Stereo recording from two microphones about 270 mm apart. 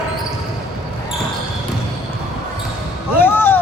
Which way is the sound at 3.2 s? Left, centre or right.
Centre.